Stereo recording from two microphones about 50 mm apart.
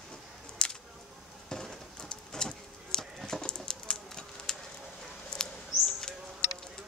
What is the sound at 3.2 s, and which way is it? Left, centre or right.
Bird, centre.